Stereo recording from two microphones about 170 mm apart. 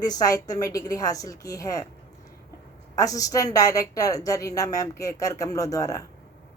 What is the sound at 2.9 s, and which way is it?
Speech, 20° left (ahead or behind).